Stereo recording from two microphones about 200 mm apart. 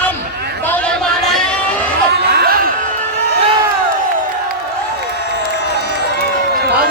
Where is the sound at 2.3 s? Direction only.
50° right (ahead or behind).